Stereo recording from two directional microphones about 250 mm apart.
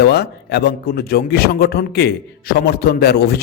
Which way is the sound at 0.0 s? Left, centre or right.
Left.